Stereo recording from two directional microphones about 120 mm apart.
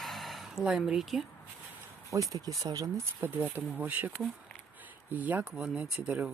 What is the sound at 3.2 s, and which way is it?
Speech, 15° right (ahead or behind).